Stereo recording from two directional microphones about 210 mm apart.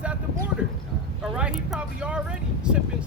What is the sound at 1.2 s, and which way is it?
Speech, 5° right (ahead or behind).